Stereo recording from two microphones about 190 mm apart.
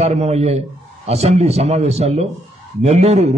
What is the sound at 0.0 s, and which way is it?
A man's voice, 35° right (ahead or behind).